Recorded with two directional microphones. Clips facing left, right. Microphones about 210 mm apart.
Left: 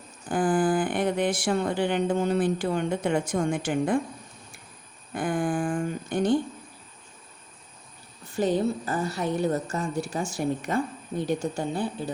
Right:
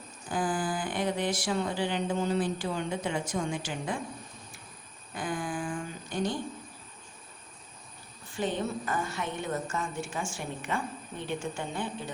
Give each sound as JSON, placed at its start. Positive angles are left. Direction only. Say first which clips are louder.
{"t": 0.3, "sound": "speech", "louder": "left 8 dB", "side_deg": 55}
{"t": 5.1, "sound": "a sound", "louder": "left 7 dB", "side_deg": 55}
{"t": 8.4, "sound": "a woman's voice", "louder": "left 7 dB", "side_deg": 40}